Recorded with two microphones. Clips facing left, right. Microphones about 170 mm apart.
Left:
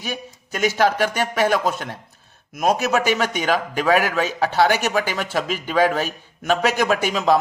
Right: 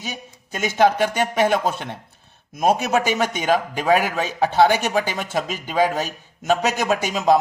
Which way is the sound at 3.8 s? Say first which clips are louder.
Left 1 dB; 20° right (ahead or behind).